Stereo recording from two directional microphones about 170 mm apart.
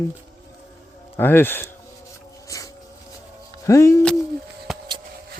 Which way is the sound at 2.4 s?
20° left (ahead or behind).